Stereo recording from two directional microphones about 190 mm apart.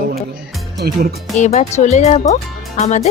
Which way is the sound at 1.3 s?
40° left (ahead or behind).